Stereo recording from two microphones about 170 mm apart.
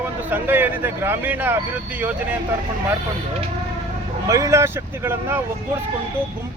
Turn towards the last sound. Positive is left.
turn(degrees=-15)  # may be behind; listen again after turning